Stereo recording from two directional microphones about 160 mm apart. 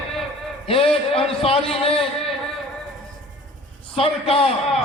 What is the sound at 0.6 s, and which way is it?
Speech, 35° left (ahead or behind).